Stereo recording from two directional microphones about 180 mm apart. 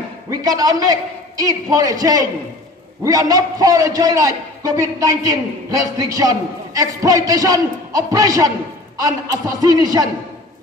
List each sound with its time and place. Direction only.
0.3 s a man's voice: 20° right (ahead or behind)